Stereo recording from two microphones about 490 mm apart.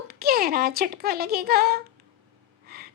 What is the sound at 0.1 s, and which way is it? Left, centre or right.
Speech, centre.